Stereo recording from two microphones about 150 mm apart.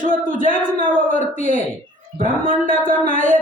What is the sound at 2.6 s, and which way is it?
Speech, 65° right (ahead or behind).